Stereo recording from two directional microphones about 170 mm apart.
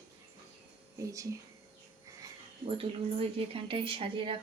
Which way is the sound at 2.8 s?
35° right (ahead or behind).